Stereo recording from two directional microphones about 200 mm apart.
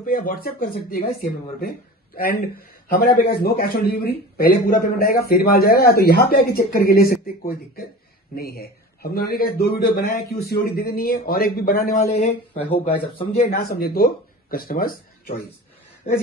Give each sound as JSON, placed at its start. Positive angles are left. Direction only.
{"t": 0.0, "sound": "a man's voice", "side_deg": 45}
{"t": 2.9, "sound": "a man's voice", "side_deg": 50}
{"t": 13.0, "sound": "a man's voice", "side_deg": 25}
{"t": 13.4, "sound": "a man's voice", "side_deg": 50}